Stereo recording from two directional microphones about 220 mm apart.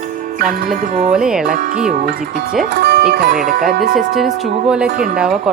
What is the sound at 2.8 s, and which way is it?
Speech, 45° right (ahead or behind).